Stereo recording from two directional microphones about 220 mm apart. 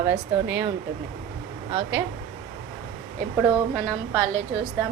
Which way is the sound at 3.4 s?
5° right (ahead or behind).